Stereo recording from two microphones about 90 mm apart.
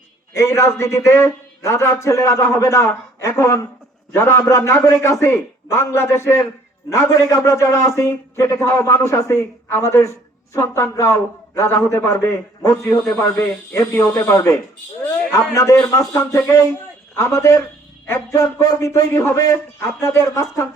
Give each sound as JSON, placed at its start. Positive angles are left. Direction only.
{"t": 0.3, "sound": "a man's voice", "side_deg": 35}